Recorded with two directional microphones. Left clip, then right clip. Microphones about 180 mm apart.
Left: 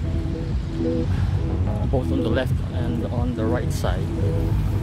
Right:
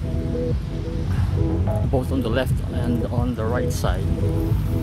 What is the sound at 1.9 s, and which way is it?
Speech, 15° right (ahead or behind).